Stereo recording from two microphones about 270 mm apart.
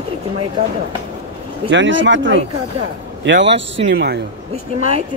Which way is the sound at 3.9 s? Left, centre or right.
Right.